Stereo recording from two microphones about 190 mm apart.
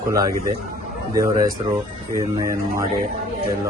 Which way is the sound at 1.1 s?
15° right (ahead or behind).